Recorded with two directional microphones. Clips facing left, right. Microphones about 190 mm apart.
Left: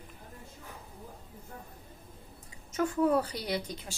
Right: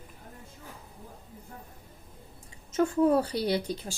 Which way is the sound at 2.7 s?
25° right (ahead or behind).